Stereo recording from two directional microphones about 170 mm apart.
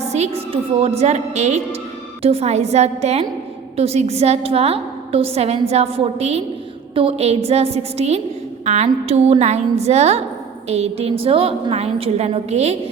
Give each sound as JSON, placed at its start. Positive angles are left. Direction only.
{"t": 0.0, "sound": "a woman's voice", "side_deg": -40}